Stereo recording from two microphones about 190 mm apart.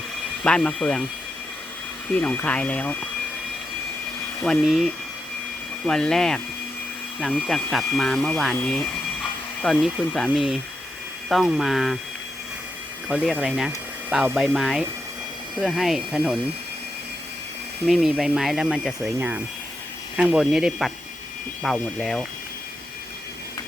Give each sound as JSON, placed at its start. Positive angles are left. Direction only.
{"t": 0.4, "sound": "speech", "side_deg": 5}
{"t": 2.1, "sound": "speech", "side_deg": 10}
{"t": 4.4, "sound": "speech", "side_deg": 0}
{"t": 13.1, "sound": "speech", "side_deg": -5}
{"t": 17.8, "sound": "speech", "side_deg": 0}